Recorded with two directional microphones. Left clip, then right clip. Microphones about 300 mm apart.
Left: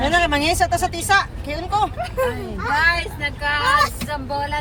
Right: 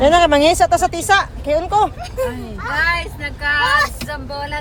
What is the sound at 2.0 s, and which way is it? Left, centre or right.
Speech, left.